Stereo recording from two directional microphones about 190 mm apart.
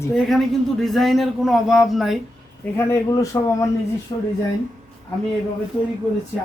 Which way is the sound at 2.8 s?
15° left (ahead or behind).